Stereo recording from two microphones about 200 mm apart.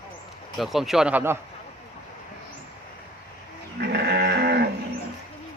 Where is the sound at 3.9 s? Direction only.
55° right (ahead or behind).